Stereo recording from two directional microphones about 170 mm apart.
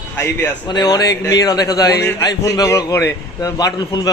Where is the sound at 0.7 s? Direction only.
25° left (ahead or behind).